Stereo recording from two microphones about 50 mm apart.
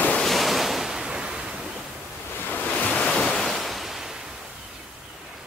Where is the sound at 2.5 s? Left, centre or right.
Left.